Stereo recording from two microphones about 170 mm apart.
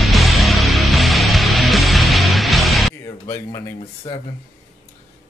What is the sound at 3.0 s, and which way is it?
Speech, 20° left (ahead or behind).